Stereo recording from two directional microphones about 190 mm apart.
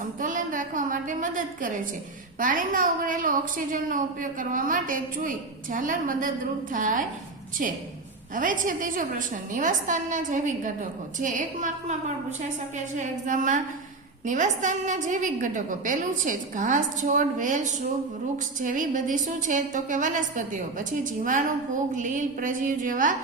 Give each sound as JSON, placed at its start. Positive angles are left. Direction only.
{"t": 0.2, "sound": "a sound", "side_deg": -45}
{"t": 2.4, "sound": "a woman's voice", "side_deg": -45}
{"t": 8.4, "sound": "a woman's voice", "side_deg": -45}